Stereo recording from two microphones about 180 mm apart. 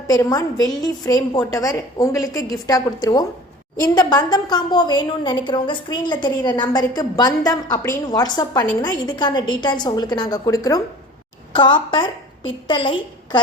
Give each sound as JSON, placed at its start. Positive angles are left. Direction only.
{"t": 0.1, "sound": "a woman's voice", "side_deg": 20}